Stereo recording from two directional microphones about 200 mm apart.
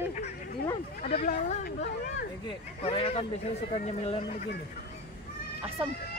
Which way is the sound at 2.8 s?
30° left (ahead or behind).